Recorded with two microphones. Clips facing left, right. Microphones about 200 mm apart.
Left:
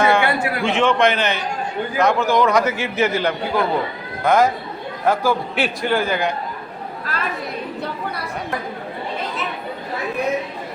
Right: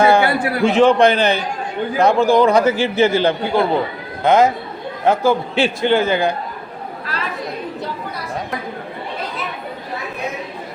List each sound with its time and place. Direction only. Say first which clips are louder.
0.0 s a man's voice: right 3 dB; 35° right (ahead or behind)